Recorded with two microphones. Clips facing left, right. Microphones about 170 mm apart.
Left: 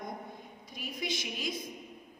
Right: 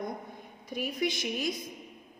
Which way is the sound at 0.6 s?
60° right (ahead or behind).